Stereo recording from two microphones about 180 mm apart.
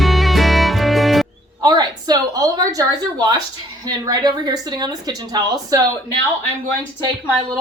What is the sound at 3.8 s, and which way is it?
Speech, 20° right (ahead or behind).